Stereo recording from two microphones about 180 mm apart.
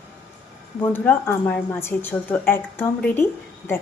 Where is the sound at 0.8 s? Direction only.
10° left (ahead or behind).